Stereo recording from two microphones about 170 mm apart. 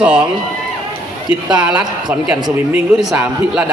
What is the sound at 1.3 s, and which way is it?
A man's voice, 5° right (ahead or behind).